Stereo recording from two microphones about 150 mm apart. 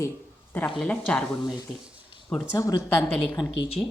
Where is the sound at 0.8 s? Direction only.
10° left (ahead or behind).